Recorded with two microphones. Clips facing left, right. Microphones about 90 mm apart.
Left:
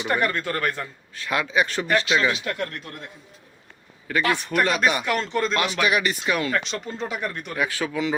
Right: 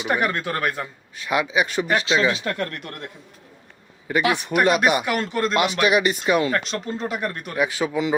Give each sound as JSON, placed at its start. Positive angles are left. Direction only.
{"t": 0.0, "sound": "a man's voice", "side_deg": -10}
{"t": 2.3, "sound": "speech", "side_deg": -40}
{"t": 4.1, "sound": "a man's voice", "side_deg": -15}
{"t": 5.0, "sound": "speech", "side_deg": -5}
{"t": 5.8, "sound": "speech", "side_deg": -20}
{"t": 6.5, "sound": "speech", "side_deg": 0}
{"t": 7.8, "sound": "speech", "side_deg": -20}